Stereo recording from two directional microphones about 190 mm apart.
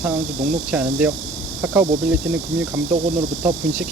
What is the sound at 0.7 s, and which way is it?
Speech, 10° right (ahead or behind).